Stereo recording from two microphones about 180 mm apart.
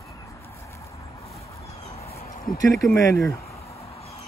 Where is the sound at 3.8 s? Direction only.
35° left (ahead or behind).